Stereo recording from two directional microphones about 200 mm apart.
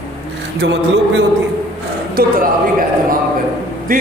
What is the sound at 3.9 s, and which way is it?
Speech, 45° right (ahead or behind).